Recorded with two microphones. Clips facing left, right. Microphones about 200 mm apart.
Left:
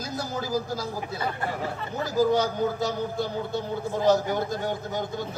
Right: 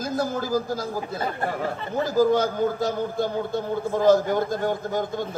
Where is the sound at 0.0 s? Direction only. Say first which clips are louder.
Right 5 dB; 55° right (ahead or behind).